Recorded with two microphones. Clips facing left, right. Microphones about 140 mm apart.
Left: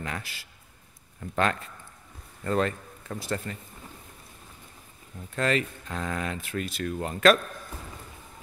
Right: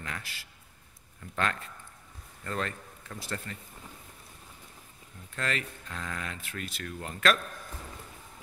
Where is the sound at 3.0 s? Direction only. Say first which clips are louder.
Left 7 dB; 35° left (ahead or behind).